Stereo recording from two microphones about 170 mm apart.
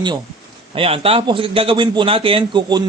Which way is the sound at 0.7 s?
35° right (ahead or behind).